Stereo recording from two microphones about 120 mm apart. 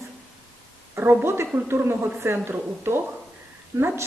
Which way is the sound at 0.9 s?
20° right (ahead or behind).